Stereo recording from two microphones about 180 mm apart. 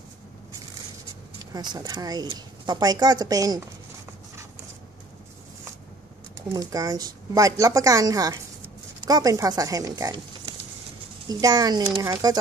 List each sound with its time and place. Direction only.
1.4 s speech: 20° right (ahead or behind)
6.3 s speech: 20° right (ahead or behind)
11.2 s speech: 20° right (ahead or behind)